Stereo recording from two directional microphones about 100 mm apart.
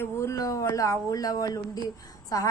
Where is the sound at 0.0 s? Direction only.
30° left (ahead or behind).